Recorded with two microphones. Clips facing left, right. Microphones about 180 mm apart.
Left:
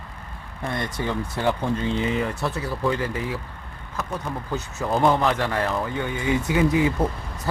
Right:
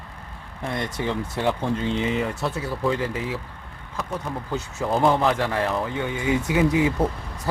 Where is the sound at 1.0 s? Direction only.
10° right (ahead or behind).